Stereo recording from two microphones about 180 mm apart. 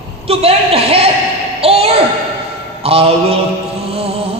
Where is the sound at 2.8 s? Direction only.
30° right (ahead or behind).